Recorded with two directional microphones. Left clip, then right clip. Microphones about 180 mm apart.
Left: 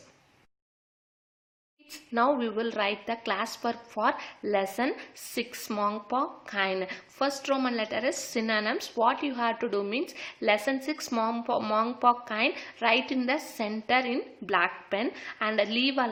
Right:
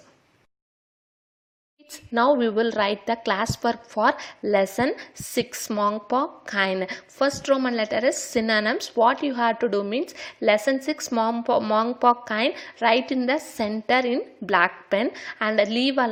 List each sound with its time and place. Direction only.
1.9 s a woman's voice: 30° right (ahead or behind)